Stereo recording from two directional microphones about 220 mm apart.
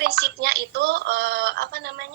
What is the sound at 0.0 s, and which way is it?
Speech, 45° right (ahead or behind).